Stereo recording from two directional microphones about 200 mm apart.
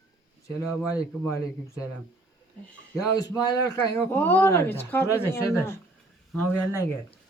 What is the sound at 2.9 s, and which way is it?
Speech, 15° left (ahead or behind).